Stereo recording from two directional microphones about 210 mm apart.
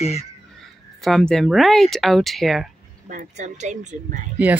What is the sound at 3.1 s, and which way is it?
Speech, 35° right (ahead or behind).